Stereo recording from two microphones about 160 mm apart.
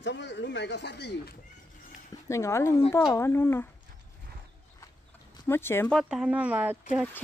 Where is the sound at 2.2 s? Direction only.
15° left (ahead or behind).